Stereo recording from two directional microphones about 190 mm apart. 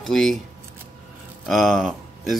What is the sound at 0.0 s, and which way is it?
Speech, centre (ahead or behind).